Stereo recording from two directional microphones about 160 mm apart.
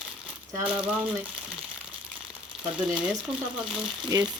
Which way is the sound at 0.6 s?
10° right (ahead or behind).